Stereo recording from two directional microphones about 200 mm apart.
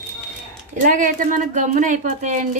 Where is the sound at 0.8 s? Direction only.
40° right (ahead or behind).